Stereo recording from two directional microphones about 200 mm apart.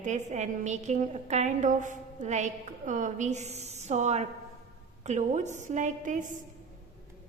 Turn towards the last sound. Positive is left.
turn(degrees=-40)  # may be behind; listen again after turning